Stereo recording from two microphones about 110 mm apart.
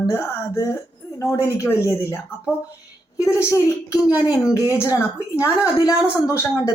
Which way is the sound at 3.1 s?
25° left (ahead or behind).